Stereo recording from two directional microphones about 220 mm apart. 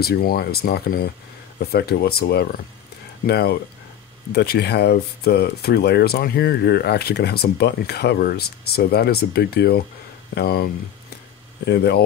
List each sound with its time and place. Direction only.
0.0 s speech: 45° left (ahead or behind)